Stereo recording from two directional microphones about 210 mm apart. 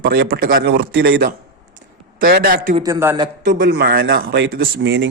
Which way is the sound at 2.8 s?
15° right (ahead or behind).